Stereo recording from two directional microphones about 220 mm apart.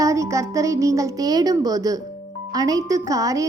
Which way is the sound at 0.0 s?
15° right (ahead or behind).